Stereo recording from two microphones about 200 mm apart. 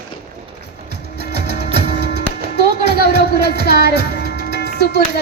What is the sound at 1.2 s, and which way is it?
Music, 55° left (ahead or behind).